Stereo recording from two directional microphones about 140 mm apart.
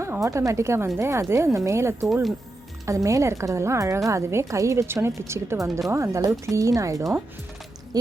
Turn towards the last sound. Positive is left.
turn(degrees=-25)  # may be behind; listen again after turning